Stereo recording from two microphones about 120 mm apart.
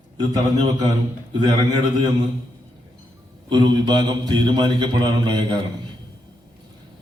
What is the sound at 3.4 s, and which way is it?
A man's voice, 40° right (ahead or behind).